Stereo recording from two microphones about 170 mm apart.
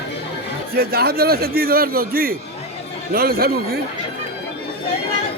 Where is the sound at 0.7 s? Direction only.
65° right (ahead or behind).